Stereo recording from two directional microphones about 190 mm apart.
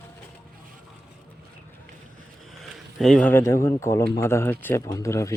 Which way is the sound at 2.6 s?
Centre (ahead or behind).